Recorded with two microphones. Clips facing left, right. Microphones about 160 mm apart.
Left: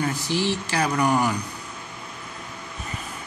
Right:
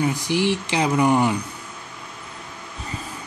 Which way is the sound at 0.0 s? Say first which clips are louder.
Right 3 dB; 15° right (ahead or behind).